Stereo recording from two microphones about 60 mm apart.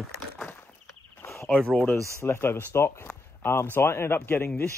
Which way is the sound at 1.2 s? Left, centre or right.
Left.